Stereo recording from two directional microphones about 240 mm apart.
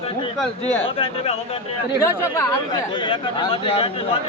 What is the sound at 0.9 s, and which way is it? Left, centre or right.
Speech, left.